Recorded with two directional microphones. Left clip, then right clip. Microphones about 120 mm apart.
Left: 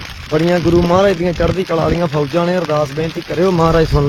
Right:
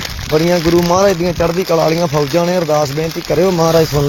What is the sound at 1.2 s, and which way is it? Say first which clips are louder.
Speech: right 1 dB; 20° left (ahead or behind).